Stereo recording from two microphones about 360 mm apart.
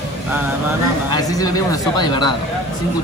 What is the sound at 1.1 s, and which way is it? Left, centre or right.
Speech, centre.